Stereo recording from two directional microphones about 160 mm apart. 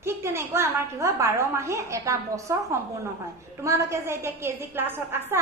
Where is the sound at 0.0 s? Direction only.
15° right (ahead or behind).